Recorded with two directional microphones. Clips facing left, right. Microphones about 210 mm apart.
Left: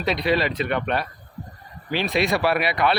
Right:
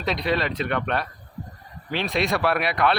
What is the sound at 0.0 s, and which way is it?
Speech, 5° left (ahead or behind).